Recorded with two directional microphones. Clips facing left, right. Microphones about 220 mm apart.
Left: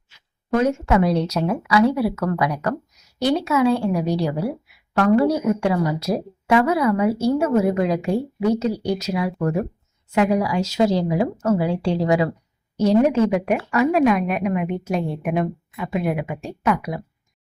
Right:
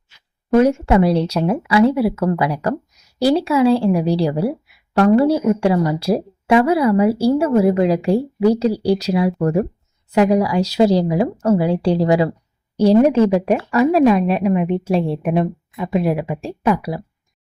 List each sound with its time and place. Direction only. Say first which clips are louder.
0.5 s a woman's voice: right 5 dB; 30° right (ahead or behind)